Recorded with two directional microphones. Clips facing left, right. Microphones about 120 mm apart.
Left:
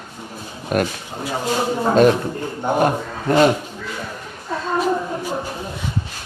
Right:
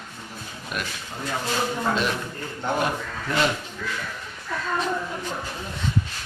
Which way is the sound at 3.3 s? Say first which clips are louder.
Left 10 dB; 50° left (ahead or behind).